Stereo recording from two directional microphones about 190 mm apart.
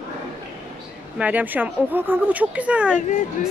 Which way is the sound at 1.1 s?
10° right (ahead or behind).